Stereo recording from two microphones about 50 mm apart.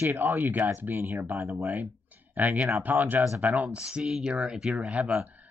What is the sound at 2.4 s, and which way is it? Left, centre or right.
Speech, right.